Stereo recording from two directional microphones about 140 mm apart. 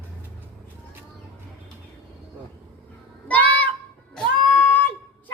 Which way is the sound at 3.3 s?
10° left (ahead or behind).